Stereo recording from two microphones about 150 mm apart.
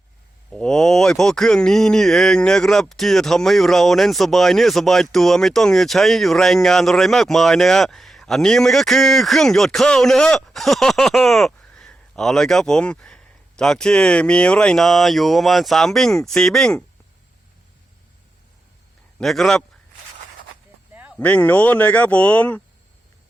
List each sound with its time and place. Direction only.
0.5 s speech: 5° left (ahead or behind)
19.2 s speech: centre (ahead or behind)
21.2 s speech: 10° left (ahead or behind)